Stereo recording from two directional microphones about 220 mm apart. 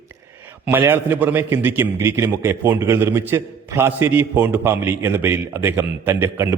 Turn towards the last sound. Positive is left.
turn(degrees=-10)  # may be behind; listen again after turning